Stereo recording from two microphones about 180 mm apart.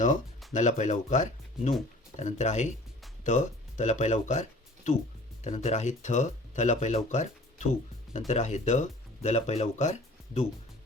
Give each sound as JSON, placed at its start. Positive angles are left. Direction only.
{"t": 0.0, "sound": "speech", "side_deg": 45}